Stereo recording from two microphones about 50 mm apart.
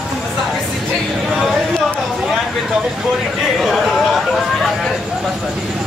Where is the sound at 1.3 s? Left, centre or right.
Centre.